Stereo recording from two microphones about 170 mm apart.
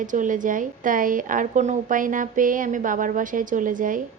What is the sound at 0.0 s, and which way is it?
A woman's voice, 50° right (ahead or behind).